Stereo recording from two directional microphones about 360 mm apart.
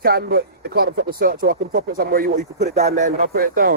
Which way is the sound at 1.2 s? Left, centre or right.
Right.